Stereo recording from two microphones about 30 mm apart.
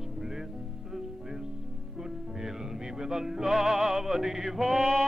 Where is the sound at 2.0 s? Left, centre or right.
Centre.